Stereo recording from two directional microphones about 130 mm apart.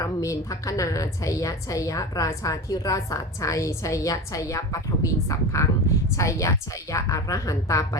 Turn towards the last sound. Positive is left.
turn(degrees=25)  # may be behind; listen again after turning